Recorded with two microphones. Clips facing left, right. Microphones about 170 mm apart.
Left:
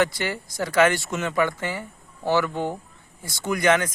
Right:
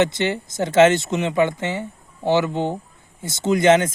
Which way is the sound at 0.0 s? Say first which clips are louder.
Right 4 dB; 20° right (ahead or behind).